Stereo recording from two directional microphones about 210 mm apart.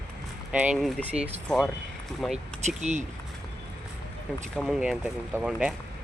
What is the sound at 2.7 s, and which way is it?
Speech, 35° right (ahead or behind).